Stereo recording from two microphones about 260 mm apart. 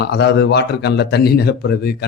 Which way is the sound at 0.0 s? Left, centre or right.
Left.